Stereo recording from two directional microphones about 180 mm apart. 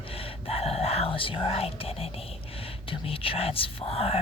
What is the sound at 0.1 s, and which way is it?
Speech, 30° left (ahead or behind).